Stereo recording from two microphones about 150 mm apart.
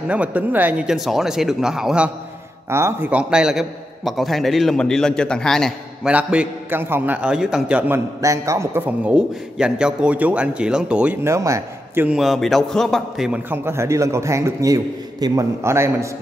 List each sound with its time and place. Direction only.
0.1 s a man's voice: 10° right (ahead or behind)
2.7 s a man's voice: 15° right (ahead or behind); by 6.1 s 5° left (ahead or behind)
6.1 s a man's voice: 10° right (ahead or behind)
12.2 s a man's voice: centre (ahead or behind)
13.5 s a man's voice: 15° right (ahead or behind)